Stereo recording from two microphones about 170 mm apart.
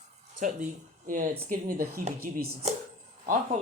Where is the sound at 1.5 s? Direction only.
50° right (ahead or behind).